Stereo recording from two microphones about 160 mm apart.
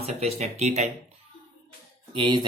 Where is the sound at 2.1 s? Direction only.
30° right (ahead or behind).